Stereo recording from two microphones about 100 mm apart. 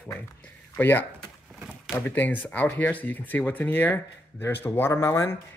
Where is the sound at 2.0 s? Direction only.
20° left (ahead or behind).